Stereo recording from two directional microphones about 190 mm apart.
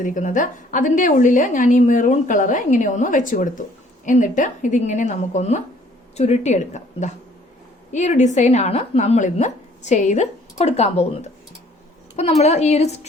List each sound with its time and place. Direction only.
0.0 s a woman's voice: 45° left (ahead or behind)